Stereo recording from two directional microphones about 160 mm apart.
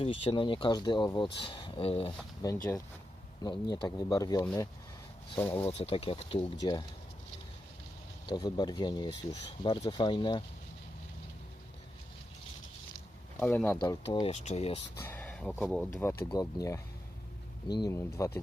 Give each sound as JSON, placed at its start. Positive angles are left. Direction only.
{"t": 0.0, "sound": "speech", "side_deg": 35}
{"t": 2.4, "sound": "speech", "side_deg": 25}
{"t": 5.6, "sound": "speech", "side_deg": 35}
{"t": 8.3, "sound": "speech", "side_deg": 25}
{"t": 13.3, "sound": "speech", "side_deg": 15}
{"t": 14.0, "sound": "speech", "side_deg": 35}
{"t": 14.9, "sound": "speech", "side_deg": 10}